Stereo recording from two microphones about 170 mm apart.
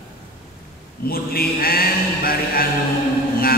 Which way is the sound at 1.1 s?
60° left (ahead or behind).